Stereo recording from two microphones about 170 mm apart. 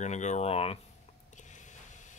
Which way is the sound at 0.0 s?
45° left (ahead or behind).